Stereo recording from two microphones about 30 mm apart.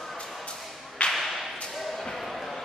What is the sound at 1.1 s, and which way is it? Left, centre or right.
Whip, centre.